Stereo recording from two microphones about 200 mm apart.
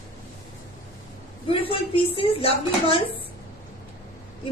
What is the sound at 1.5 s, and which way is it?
Speech, 30° left (ahead or behind).